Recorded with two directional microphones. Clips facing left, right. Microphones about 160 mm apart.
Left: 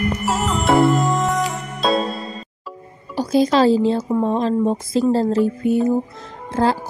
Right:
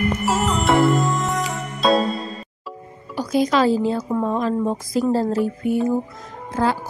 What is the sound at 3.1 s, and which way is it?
A woman's voice, 30° left (ahead or behind).